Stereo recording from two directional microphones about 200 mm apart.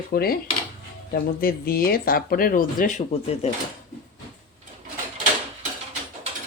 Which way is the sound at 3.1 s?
30° left (ahead or behind).